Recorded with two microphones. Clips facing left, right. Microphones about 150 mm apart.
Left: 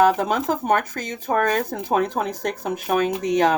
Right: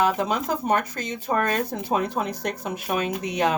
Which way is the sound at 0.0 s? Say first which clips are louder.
Left 5 dB; 45° left (ahead or behind).